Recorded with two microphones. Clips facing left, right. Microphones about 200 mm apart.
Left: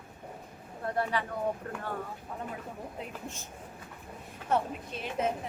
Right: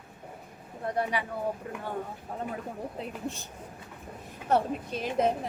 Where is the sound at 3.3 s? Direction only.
35° right (ahead or behind).